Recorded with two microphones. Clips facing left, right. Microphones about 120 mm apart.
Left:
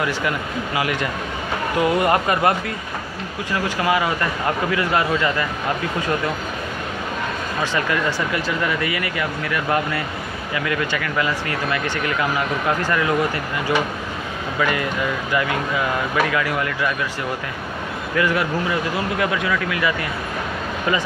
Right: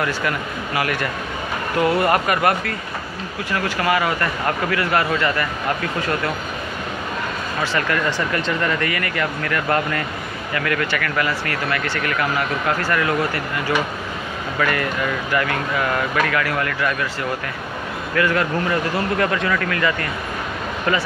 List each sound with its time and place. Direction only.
0.7 s speech: 20° left (ahead or behind)
7.6 s speech: 15° left (ahead or behind)
18.1 s speech: 15° left (ahead or behind)